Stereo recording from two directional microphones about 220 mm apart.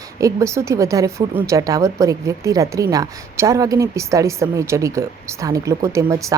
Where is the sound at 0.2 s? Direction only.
15° right (ahead or behind).